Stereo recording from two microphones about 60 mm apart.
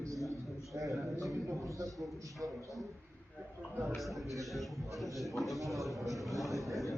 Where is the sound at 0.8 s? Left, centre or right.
Right.